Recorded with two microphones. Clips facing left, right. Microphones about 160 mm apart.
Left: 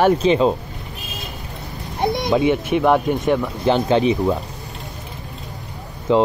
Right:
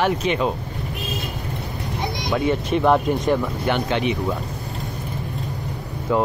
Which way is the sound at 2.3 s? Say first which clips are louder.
Left 2 dB; 15° left (ahead or behind).